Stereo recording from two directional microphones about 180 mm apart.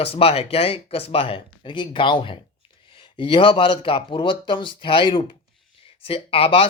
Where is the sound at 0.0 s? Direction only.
35° left (ahead or behind).